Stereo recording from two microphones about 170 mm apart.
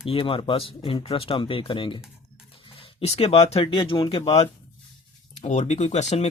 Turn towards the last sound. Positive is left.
turn(degrees=40)  # may be behind; listen again after turning